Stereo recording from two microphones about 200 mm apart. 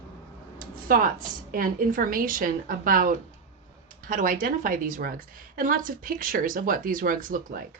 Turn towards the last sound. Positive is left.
turn(degrees=-40)  # may be behind; listen again after turning